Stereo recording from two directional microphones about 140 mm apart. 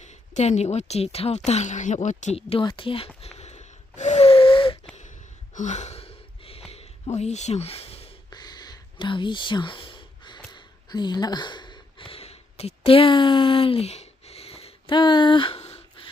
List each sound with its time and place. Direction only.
0.0 s a woman's voice: 55° left (ahead or behind); by 3.1 s 40° left (ahead or behind)
3.2 s wheeze: 50° left (ahead or behind)
5.5 s sigh: 55° left (ahead or behind)
6.7 s a sound: 45° left (ahead or behind)
8.3 s whispering: 30° left (ahead or behind)
10.5 s a sound: 30° left (ahead or behind)